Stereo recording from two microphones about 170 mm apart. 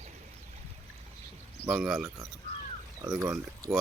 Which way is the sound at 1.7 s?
5° right (ahead or behind).